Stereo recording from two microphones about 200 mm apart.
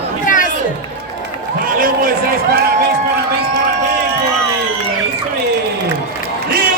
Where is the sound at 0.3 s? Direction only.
40° left (ahead or behind).